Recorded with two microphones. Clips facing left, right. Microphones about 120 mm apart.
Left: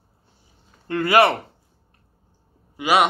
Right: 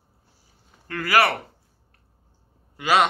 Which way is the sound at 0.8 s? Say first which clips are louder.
Left 4 dB; 25° left (ahead or behind).